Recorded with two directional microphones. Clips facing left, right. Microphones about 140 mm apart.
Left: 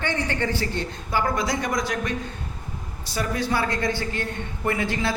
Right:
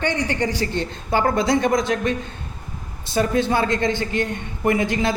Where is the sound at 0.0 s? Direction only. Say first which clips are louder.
Right 4 dB; 15° right (ahead or behind).